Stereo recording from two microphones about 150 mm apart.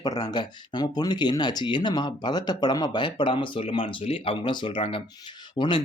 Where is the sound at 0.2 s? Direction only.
30° left (ahead or behind).